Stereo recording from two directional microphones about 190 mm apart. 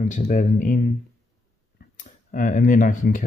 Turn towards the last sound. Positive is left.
turn(degrees=45)  # may be behind; listen again after turning